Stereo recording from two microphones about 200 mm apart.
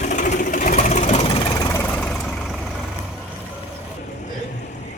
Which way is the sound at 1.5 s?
15° left (ahead or behind).